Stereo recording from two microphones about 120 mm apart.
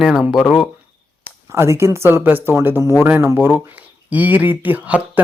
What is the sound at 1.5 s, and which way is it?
Speech, 20° right (ahead or behind).